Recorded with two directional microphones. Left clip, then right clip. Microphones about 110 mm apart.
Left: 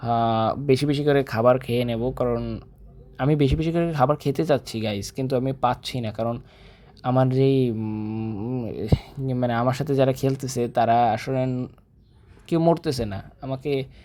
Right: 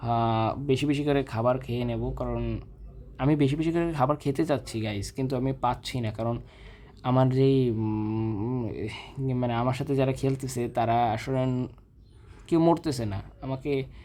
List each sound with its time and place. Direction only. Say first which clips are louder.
0.0 s speech: left 5 dB; 25° left (ahead or behind)
2.3 s speech: left 6 dB; 15° left (ahead or behind)
7.8 s mantra: right 1 dB; 5° left (ahead or behind)
8.6 s speech: left 6 dB; 30° left (ahead or behind)
11.4 s mantra: left 2 dB; 5° left (ahead or behind)
12.7 s speech: left 3 dB; 20° left (ahead or behind)